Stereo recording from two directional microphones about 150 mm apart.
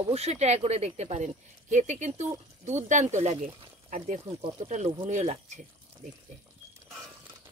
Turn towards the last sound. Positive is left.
turn(degrees=-50)  # may be behind; listen again after turning